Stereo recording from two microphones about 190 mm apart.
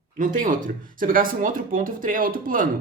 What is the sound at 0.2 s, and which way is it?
Speech, 45° right (ahead or behind).